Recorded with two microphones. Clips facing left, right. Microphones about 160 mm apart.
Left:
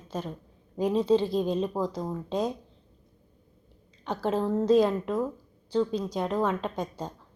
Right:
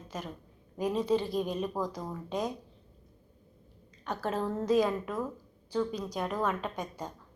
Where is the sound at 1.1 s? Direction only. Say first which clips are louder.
Left 5 dB; 25° left (ahead or behind).